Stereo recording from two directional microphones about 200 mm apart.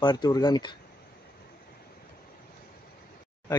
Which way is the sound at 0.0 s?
20° left (ahead or behind).